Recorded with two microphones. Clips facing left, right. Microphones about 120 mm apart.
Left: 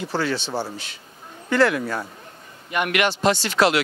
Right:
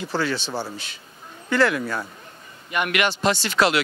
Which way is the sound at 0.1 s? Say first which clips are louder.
Even; 40° left (ahead or behind).